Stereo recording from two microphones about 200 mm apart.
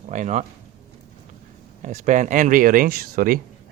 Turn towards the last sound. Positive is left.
turn(degrees=-45)  # may be behind; listen again after turning